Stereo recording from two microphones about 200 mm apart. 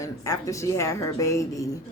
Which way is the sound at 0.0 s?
15° left (ahead or behind).